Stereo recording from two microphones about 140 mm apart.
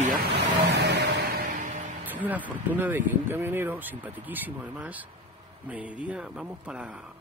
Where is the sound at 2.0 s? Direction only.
10° right (ahead or behind).